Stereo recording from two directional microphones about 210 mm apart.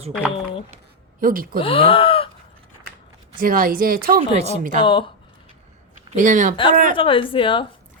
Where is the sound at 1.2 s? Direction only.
40° right (ahead or behind).